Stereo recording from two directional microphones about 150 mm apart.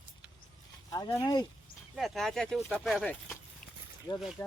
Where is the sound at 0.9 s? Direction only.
25° left (ahead or behind).